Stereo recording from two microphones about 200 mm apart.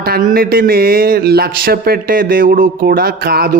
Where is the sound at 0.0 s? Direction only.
45° right (ahead or behind).